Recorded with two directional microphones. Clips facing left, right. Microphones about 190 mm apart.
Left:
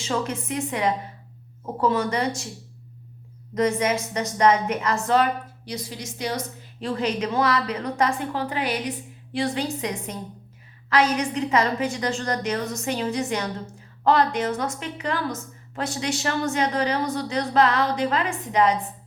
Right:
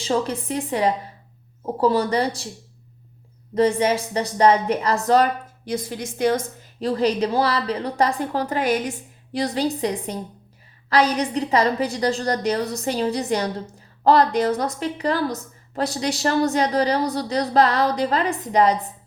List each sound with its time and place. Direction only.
0.0 s a woman's voice: 35° right (ahead or behind)
3.5 s a woman's voice: 30° right (ahead or behind)